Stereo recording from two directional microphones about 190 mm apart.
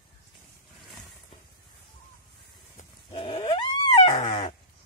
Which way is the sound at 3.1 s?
25° left (ahead or behind).